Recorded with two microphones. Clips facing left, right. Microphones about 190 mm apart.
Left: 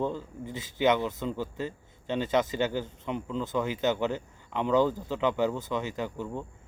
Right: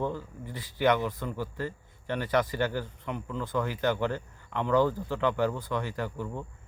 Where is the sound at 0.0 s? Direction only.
20° left (ahead or behind).